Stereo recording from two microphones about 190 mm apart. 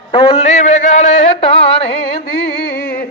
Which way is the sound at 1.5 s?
30° left (ahead or behind).